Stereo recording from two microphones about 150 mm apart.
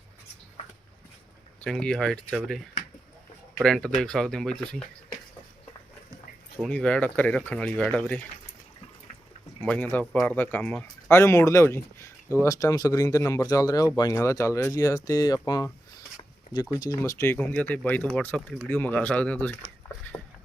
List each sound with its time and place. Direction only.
1.6 s speech: 5° left (ahead or behind)
6.6 s speech: 10° left (ahead or behind)
9.6 s speech: 10° left (ahead or behind)
16.1 s zipper: 25° left (ahead or behind)
16.8 s speech: 20° left (ahead or behind)